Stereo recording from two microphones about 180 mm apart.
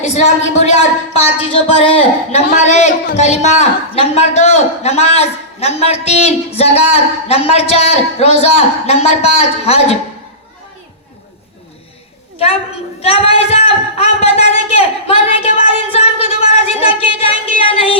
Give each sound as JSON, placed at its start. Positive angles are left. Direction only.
{"t": 0.0, "sound": "speech", "side_deg": 40}
{"t": 13.0, "sound": "speech", "side_deg": 35}